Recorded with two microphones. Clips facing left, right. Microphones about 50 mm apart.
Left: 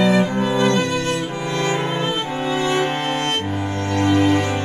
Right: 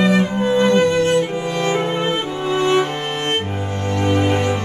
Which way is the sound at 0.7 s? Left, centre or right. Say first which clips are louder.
Right 5 dB; right.